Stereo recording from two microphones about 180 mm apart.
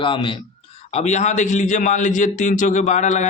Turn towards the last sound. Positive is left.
turn(degrees=40)  # may be behind; listen again after turning